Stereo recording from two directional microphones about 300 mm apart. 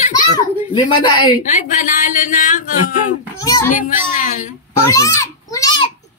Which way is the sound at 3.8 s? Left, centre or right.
Left.